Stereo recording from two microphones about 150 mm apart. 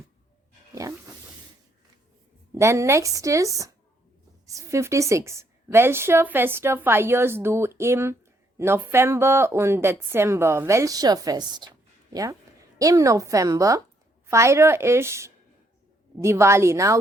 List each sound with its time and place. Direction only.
0.7 s music: 20° right (ahead or behind)
2.6 s a woman's voice: 20° right (ahead or behind)